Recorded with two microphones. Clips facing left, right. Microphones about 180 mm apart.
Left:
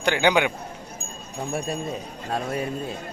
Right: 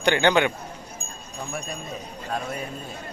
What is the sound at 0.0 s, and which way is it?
Speech, 5° left (ahead or behind).